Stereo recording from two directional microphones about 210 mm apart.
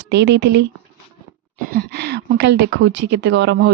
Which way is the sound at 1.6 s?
45° right (ahead or behind).